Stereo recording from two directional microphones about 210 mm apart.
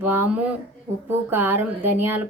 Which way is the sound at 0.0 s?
10° right (ahead or behind).